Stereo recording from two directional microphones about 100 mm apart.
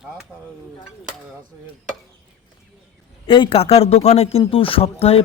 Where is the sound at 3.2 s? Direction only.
60° left (ahead or behind); by 5.2 s 80° left.